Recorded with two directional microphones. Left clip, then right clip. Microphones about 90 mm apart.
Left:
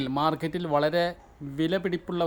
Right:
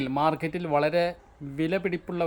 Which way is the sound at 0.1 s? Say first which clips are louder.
Right 1 dB; 10° left (ahead or behind).